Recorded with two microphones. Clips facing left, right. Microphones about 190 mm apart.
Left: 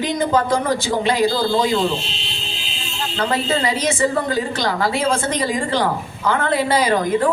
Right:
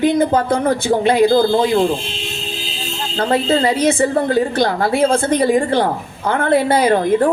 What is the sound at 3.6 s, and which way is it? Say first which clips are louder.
Speech: right 4 dB; 55° right (ahead or behind).